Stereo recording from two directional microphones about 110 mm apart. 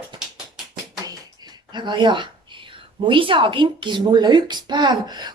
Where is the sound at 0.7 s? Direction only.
40° right (ahead or behind).